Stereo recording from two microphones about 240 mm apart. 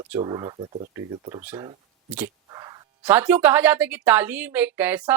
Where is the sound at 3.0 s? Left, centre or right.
Centre.